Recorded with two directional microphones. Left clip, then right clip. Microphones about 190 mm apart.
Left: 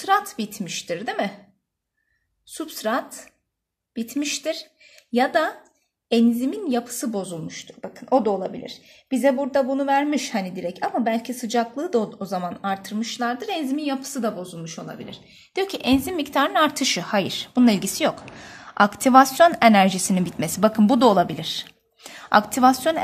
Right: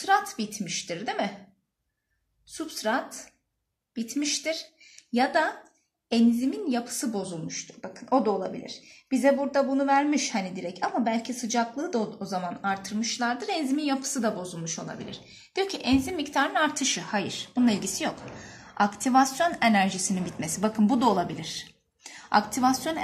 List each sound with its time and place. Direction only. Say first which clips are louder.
0.0 s a woman's voice: left 3 dB; 45° left (ahead or behind)
2.5 s a woman's voice: left 3 dB; 45° left (ahead or behind)